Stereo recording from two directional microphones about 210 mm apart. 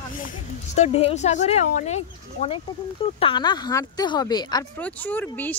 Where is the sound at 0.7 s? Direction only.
30° left (ahead or behind).